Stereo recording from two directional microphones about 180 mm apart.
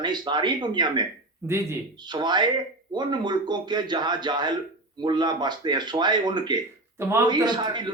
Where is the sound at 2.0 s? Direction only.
25° right (ahead or behind).